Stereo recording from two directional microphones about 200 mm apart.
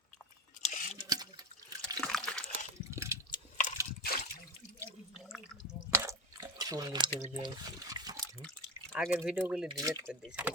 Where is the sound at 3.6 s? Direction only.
40° left (ahead or behind).